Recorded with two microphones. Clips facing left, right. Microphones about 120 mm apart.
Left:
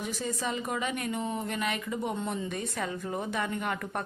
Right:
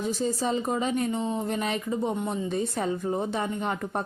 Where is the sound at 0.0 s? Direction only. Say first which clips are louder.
Right 6 dB; 30° right (ahead or behind).